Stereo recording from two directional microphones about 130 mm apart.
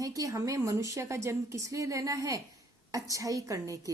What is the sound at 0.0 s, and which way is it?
A woman's voice, 25° right (ahead or behind).